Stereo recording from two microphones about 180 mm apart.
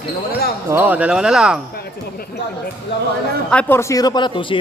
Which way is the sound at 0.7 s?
10° right (ahead or behind).